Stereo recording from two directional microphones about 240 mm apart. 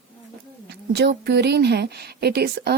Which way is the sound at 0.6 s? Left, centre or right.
Right.